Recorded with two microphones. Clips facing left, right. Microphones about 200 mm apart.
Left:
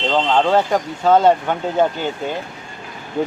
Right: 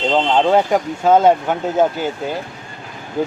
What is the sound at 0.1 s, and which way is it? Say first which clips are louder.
Speech: right 1 dB; 15° right (ahead or behind).